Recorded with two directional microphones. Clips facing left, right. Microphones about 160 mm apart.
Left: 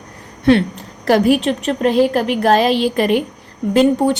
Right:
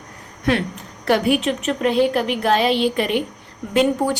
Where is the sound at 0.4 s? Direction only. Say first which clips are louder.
Left 7 dB; 30° left (ahead or behind).